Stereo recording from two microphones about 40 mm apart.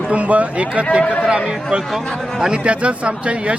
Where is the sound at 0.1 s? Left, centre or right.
Right.